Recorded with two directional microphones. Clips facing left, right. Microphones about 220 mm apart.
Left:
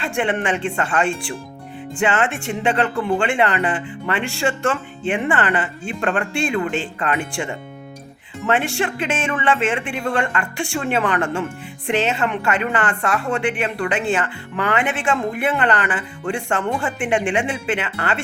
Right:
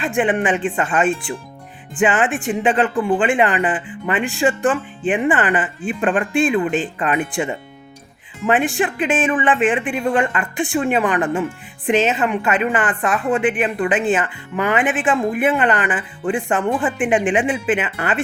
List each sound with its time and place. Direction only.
0.0 s a woman's voice: 15° right (ahead or behind)